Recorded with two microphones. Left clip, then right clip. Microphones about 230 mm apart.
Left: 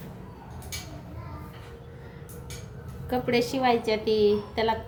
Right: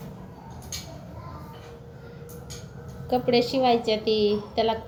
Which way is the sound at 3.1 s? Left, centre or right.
Left.